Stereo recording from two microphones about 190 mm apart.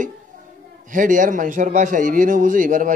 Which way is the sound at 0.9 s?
45° right (ahead or behind).